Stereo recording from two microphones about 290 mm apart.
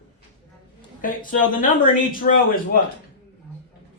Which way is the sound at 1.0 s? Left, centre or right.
Left.